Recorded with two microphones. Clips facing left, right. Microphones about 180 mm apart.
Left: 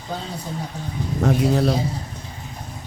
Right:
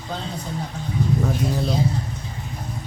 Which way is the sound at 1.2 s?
75° left (ahead or behind).